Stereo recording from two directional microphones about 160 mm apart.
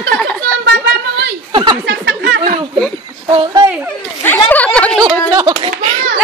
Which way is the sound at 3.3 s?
30° right (ahead or behind).